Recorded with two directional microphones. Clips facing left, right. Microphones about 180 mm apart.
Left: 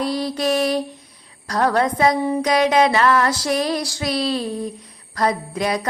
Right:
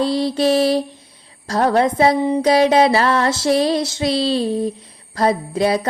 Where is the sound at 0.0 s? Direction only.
30° right (ahead or behind).